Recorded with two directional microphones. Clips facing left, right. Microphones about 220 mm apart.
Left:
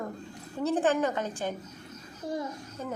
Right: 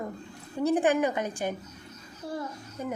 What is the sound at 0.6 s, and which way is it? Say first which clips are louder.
Speech: right 2 dB; 15° right (ahead or behind).